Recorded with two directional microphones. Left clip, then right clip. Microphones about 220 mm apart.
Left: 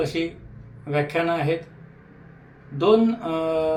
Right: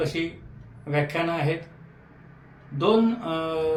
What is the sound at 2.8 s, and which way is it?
Speech, 15° left (ahead or behind).